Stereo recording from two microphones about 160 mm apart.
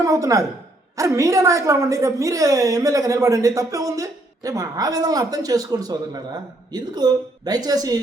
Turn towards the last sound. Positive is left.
turn(degrees=-25)  # may be behind; listen again after turning